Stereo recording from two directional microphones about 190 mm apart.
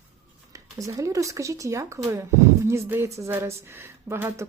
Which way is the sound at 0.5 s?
15° right (ahead or behind).